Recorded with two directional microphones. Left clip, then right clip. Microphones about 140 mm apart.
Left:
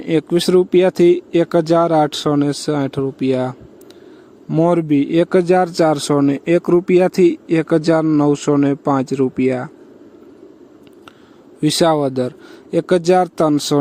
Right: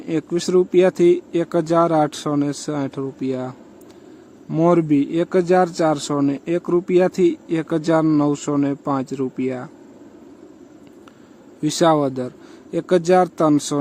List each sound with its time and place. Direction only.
0.0 s speech: 40° left (ahead or behind)
4.4 s a man's voice: 30° left (ahead or behind)
4.7 s speech: 45° left (ahead or behind)
11.6 s speech: 40° left (ahead or behind)